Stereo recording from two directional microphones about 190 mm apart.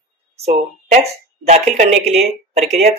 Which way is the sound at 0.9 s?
35° right (ahead or behind).